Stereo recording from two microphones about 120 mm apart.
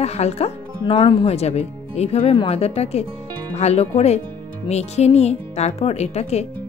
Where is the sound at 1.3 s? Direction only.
65° left (ahead or behind).